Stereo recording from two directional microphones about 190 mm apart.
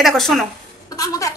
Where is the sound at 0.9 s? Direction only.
15° left (ahead or behind).